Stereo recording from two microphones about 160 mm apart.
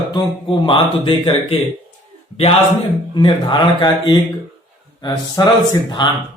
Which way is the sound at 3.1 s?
30° left (ahead or behind).